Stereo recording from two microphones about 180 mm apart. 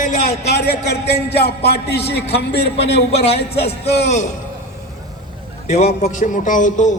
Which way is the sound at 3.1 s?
35° left (ahead or behind).